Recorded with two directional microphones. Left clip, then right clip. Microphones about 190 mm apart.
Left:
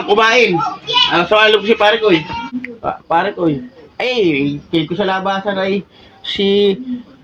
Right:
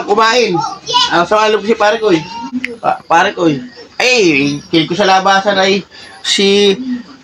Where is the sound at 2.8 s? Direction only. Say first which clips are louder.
Right 5 dB; 15° right (ahead or behind).